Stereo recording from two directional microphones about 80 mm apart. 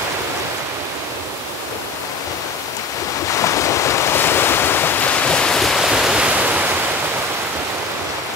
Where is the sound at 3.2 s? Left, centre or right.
Left; by 6.6 s centre.